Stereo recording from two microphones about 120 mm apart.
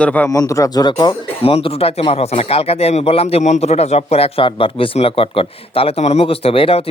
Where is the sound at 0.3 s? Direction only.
25° left (ahead or behind).